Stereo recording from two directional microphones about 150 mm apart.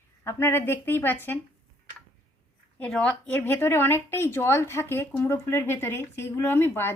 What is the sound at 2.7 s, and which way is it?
Speech, 5° left (ahead or behind).